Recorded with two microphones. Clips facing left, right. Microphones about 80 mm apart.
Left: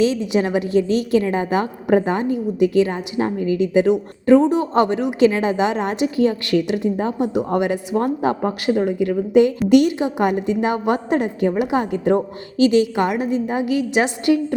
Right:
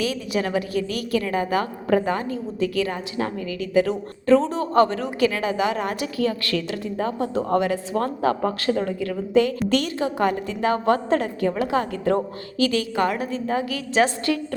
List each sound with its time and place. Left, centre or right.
0.0 s a woman's voice: left